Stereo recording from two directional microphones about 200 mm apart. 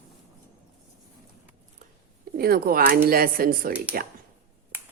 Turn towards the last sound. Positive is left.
turn(degrees=-45)  # may be behind; listen again after turning